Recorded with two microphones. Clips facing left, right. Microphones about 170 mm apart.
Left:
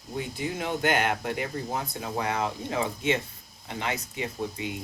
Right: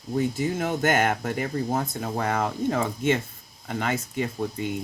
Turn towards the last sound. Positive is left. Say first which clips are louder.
# right 4 dB
turn(degrees=-50)  # may be behind; listen again after turning